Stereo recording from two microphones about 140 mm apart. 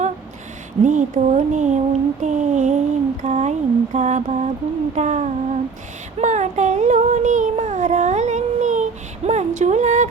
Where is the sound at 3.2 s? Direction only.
55° right (ahead or behind).